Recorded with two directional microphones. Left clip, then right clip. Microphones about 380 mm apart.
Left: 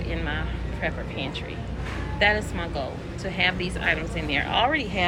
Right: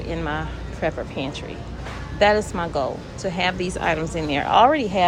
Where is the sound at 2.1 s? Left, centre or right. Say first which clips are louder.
Right 5 dB; right.